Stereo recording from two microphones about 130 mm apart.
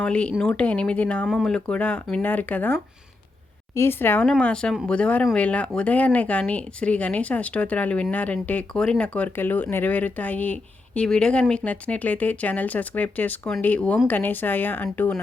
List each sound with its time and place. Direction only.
0.0 s speech: 10° left (ahead or behind)
3.8 s speech: 15° left (ahead or behind)